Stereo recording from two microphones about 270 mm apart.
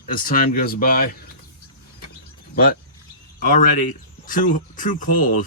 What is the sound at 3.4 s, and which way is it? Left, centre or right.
Speech, left.